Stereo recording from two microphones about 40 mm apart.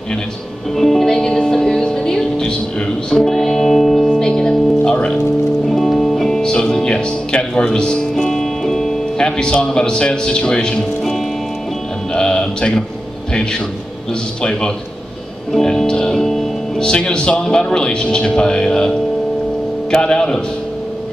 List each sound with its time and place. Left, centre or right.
0.7 s music: centre
4.1 s music: centre
5.7 s music: centre
6.4 s speech: centre
8.2 s music: centre
9.2 s a man's voice: left
12.1 s music: centre
13.3 s a man's voice: left
15.6 s music: centre
16.8 s a man's voice: left